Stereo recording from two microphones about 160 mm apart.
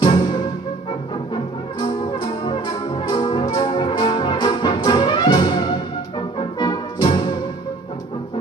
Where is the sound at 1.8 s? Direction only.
30° left (ahead or behind).